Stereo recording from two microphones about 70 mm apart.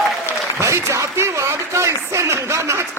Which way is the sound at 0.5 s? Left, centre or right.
Right.